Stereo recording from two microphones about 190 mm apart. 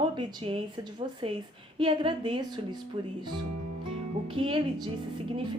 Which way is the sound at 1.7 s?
25° right (ahead or behind).